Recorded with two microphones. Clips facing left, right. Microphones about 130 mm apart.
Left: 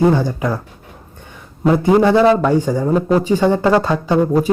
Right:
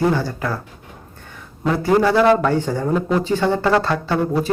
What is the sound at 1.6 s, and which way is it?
Speech, 20° left (ahead or behind).